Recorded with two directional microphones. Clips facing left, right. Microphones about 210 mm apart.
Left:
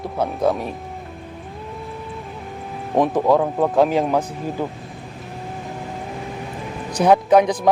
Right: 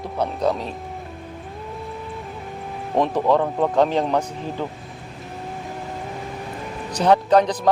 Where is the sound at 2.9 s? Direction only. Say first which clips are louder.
Left 2 dB; 10° left (ahead or behind).